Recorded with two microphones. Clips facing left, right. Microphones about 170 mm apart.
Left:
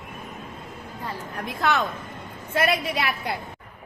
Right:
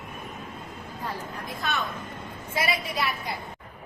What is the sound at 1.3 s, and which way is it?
Speech, 75° left (ahead or behind).